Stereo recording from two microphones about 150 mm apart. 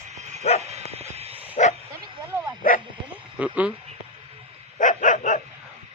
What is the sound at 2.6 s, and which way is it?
Bow-wow, 70° left (ahead or behind).